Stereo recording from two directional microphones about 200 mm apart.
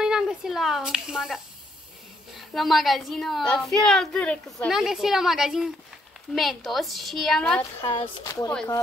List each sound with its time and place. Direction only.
0.0 s a sound: 5° right (ahead or behind)
2.3 s a woman's voice: centre (ahead or behind)
7.8 s speech: 20° left (ahead or behind)